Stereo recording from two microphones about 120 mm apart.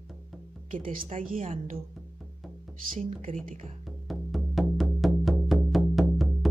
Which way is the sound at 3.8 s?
Centre (ahead or behind).